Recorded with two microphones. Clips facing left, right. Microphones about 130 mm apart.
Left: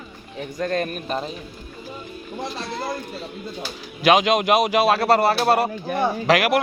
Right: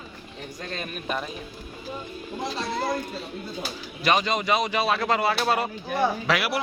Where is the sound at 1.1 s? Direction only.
30° left (ahead or behind).